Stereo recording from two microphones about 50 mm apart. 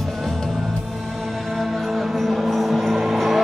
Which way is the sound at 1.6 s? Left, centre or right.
Centre.